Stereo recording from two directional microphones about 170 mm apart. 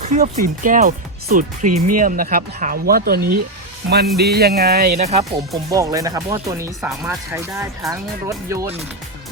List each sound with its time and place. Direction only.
0.0 s speech: 50° right (ahead or behind); by 4.9 s 65° right (ahead or behind)
4.9 s speech: 40° right (ahead or behind)
5.7 s speech: 20° right (ahead or behind)